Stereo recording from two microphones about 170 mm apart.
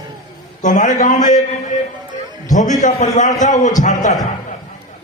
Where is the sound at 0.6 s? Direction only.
50° left (ahead or behind).